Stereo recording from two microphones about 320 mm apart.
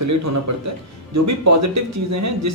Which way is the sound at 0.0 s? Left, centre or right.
Right.